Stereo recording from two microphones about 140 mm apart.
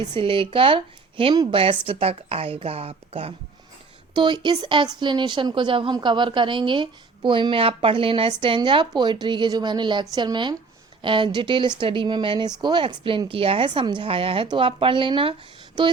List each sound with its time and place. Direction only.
0.1 s a woman's voice: 40° right (ahead or behind)